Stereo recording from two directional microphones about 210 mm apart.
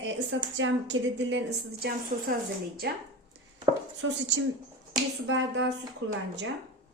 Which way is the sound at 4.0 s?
65° right (ahead or behind).